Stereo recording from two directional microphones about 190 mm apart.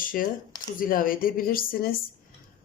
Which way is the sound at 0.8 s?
50° left (ahead or behind).